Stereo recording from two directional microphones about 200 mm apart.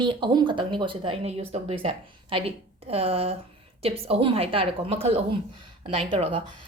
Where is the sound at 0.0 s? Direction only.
25° right (ahead or behind).